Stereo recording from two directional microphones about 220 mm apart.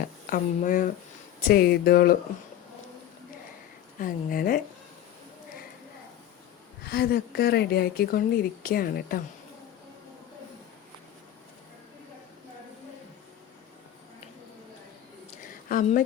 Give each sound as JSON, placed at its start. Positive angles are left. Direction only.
{"t": 0.3, "sound": "speech", "side_deg": 35}
{"t": 4.0, "sound": "speech", "side_deg": 40}
{"t": 6.8, "sound": "speech", "side_deg": 45}
{"t": 15.7, "sound": "speech", "side_deg": 35}